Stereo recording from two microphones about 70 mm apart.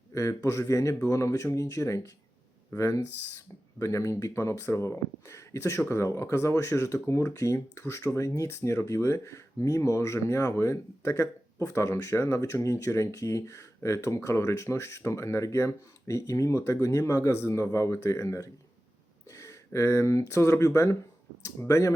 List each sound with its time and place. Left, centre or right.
0.1 s speech: left